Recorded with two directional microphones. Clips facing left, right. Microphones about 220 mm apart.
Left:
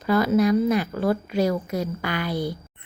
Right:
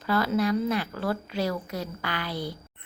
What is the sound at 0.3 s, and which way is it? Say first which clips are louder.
A woman's voice: left 7 dB; 15° left (ahead or behind).